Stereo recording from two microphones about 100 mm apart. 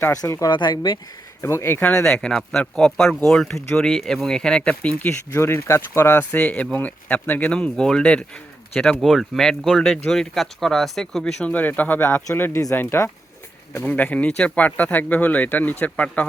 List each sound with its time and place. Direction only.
0.1 s speech: 30° left (ahead or behind)
0.5 s speech: 45° left (ahead or behind)
1.4 s speech: 25° left (ahead or behind)
1.9 s speech: 10° left (ahead or behind)
5.3 s speech: 25° left (ahead or behind)